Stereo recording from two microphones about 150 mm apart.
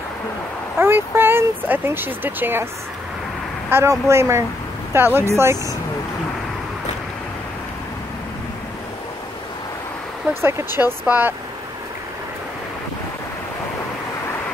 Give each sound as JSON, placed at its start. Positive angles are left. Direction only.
{"t": 0.7, "sound": "speech", "side_deg": -15}
{"t": 3.7, "sound": "speech", "side_deg": -20}
{"t": 10.8, "sound": "speech", "side_deg": -10}